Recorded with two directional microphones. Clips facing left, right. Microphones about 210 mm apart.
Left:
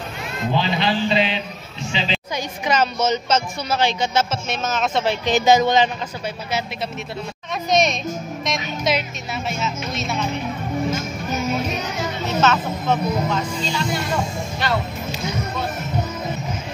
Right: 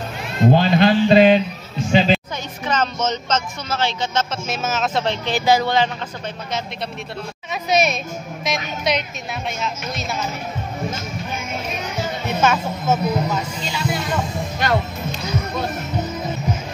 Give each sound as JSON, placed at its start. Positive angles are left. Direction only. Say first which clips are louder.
{"t": 0.5, "sound": "a man's voice", "louder": "right 6 dB", "side_deg": -50}
{"t": 2.3, "sound": "speech", "louder": "left 2 dB", "side_deg": 10}
{"t": 4.5, "sound": "speech", "louder": "even", "side_deg": -5}
{"t": 5.1, "sound": "speech", "louder": "left 4 dB", "side_deg": 15}
{"t": 7.7, "sound": "speech", "louder": "even", "side_deg": -5}
{"t": 12.3, "sound": "speech", "louder": "even", "side_deg": -10}
{"t": 14.6, "sound": "speech", "louder": "right 3 dB", "side_deg": -45}